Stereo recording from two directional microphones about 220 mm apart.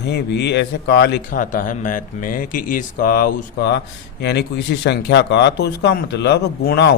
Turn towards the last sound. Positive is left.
turn(degrees=45)  # may be behind; listen again after turning